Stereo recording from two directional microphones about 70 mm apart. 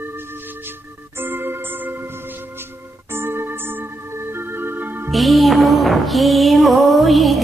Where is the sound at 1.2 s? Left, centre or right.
Right.